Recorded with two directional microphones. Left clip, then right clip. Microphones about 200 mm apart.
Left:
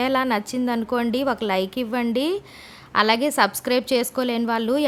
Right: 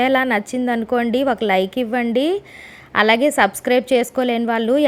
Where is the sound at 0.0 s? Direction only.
5° right (ahead or behind).